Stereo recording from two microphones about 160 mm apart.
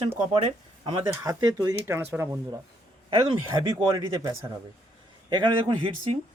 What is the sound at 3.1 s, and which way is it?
Speech, 30° right (ahead or behind).